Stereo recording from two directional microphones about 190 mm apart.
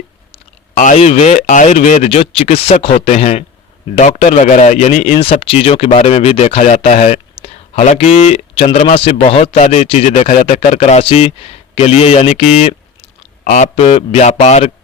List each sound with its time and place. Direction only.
0.3 s speech: 40° left (ahead or behind)